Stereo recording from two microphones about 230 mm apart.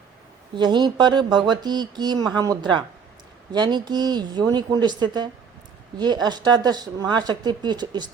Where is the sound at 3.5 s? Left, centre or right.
Centre.